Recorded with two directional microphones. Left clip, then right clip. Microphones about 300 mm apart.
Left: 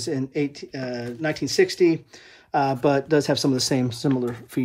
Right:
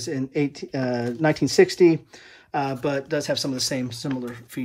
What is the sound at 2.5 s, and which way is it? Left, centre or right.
Speech, centre.